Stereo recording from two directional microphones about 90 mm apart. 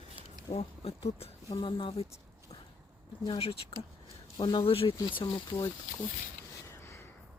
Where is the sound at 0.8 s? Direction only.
90° left.